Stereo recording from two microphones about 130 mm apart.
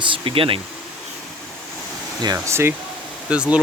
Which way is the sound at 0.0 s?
40° right (ahead or behind).